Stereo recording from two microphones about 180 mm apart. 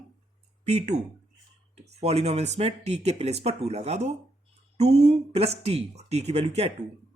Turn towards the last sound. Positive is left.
turn(degrees=-35)  # may be behind; listen again after turning